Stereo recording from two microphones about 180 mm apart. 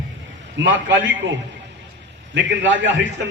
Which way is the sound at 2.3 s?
90° right.